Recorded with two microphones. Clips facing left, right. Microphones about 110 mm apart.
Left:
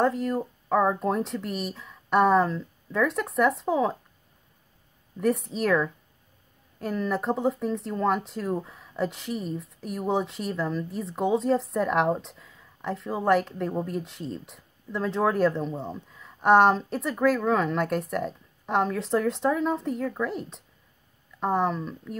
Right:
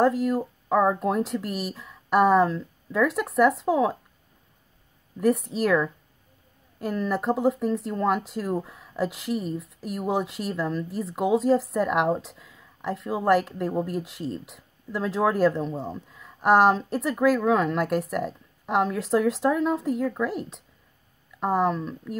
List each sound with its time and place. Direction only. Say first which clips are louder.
0.0 s speech: right 3 dB; centre (ahead or behind)
5.2 s speech: right 2 dB; centre (ahead or behind)